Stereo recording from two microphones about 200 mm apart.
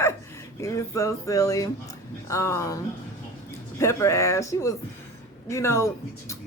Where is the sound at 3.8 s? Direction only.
15° left (ahead or behind).